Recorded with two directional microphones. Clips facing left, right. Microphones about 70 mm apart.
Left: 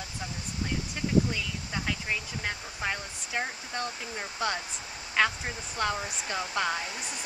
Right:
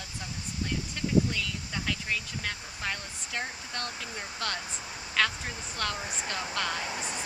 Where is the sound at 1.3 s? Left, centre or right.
Centre.